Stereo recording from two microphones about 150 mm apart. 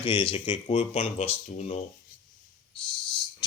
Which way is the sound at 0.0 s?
35° left (ahead or behind).